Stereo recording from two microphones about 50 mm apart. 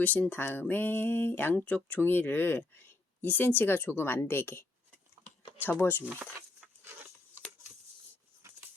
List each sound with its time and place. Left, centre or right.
0.0 s a sound: left
0.6 s speech: left
5.6 s speech: left
6.6 s patter: centre